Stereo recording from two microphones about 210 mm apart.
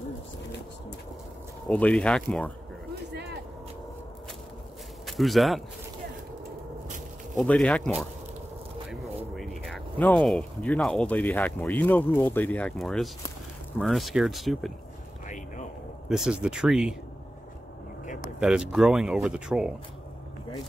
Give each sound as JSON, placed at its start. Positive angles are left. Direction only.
{"t": 1.7, "sound": "speech", "side_deg": 5}
{"t": 3.1, "sound": "vehicle", "side_deg": -55}
{"t": 5.0, "sound": "speech", "side_deg": 0}
{"t": 7.3, "sound": "speech", "side_deg": 5}
{"t": 15.2, "sound": "a sound", "side_deg": 35}
{"t": 16.1, "sound": "speech", "side_deg": -5}
{"t": 18.4, "sound": "speech", "side_deg": -5}